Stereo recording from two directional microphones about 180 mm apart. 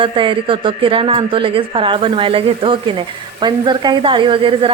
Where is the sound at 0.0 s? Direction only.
30° right (ahead or behind).